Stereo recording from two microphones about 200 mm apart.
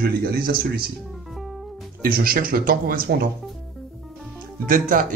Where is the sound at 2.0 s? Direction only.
45° right (ahead or behind).